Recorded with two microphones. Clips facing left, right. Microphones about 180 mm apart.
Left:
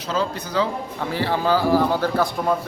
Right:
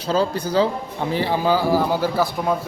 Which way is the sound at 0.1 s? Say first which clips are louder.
Right 4 dB; 30° right (ahead or behind).